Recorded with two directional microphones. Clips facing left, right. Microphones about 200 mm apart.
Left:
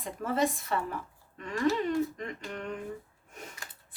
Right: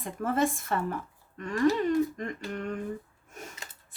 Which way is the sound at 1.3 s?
45° right (ahead or behind).